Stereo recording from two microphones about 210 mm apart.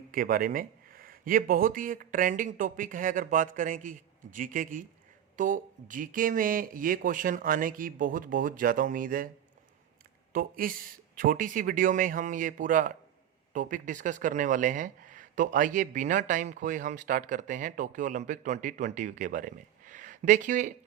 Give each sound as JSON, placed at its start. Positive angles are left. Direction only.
{"t": 0.1, "sound": "speech", "side_deg": -40}
{"t": 10.3, "sound": "speech", "side_deg": -40}